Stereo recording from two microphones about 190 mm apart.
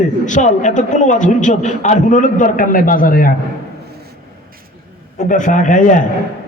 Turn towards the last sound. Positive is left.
turn(degrees=45)  # may be behind; listen again after turning